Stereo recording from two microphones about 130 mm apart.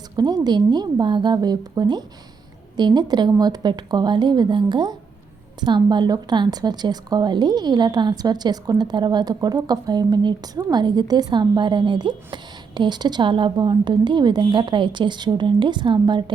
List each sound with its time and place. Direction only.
0.4 s a woman's voice: 30° right (ahead or behind)